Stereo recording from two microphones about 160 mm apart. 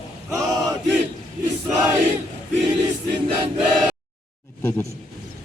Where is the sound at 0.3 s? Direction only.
20° right (ahead or behind).